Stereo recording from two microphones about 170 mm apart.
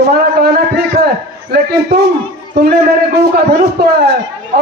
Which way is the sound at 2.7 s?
70° right (ahead or behind).